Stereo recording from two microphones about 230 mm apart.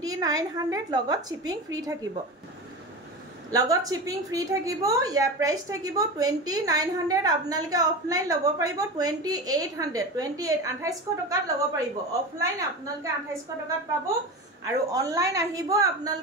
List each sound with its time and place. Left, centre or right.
0.0 s a woman's voice: centre
3.5 s a woman's voice: centre
14.7 s a woman's voice: centre